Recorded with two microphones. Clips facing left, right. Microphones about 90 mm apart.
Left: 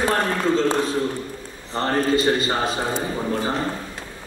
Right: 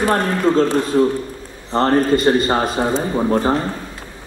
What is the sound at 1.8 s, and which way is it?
Speech, 50° right (ahead or behind).